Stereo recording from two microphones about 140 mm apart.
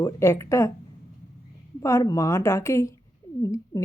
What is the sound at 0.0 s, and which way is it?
Speech, 20° left (ahead or behind).